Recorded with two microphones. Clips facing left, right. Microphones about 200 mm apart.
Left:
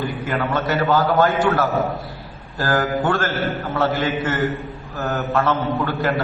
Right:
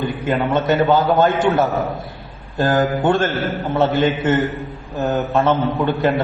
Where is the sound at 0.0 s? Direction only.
20° right (ahead or behind).